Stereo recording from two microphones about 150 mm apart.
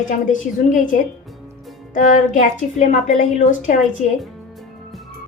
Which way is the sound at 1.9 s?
60° left (ahead or behind).